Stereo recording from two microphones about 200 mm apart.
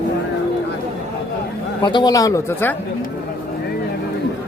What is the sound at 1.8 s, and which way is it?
Speech, 25° left (ahead or behind).